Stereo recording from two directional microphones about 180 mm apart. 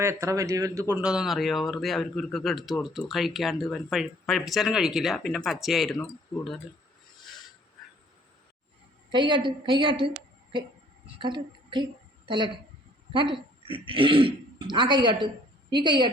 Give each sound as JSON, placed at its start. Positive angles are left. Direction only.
{"t": 0.0, "sound": "speech", "side_deg": -15}
{"t": 6.3, "sound": "speech", "side_deg": 25}
{"t": 9.1, "sound": "speech", "side_deg": -25}
{"t": 11.0, "sound": "a sound", "side_deg": -25}
{"t": 13.1, "sound": "speech", "side_deg": -25}